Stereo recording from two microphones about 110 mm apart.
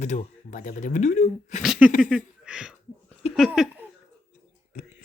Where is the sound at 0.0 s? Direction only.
90° left.